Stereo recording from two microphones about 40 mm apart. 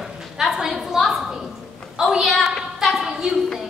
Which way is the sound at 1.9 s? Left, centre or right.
Centre.